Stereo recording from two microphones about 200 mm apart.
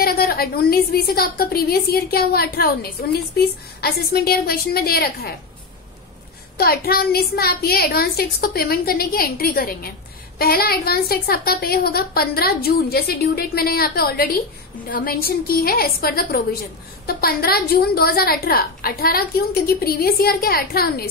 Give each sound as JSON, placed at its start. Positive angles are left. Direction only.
{"t": 0.0, "sound": "a woman's voice", "side_deg": 50}
{"t": 6.6, "sound": "a woman's voice", "side_deg": 50}